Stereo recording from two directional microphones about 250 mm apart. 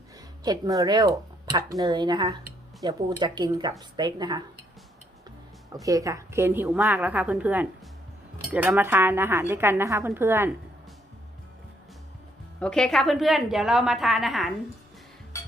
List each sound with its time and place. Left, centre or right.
0.4 s speech: centre
5.8 s speech: centre
12.5 s a woman's voice: centre